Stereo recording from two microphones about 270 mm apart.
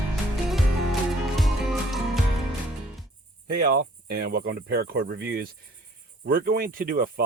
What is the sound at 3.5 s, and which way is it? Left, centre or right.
Speech, right.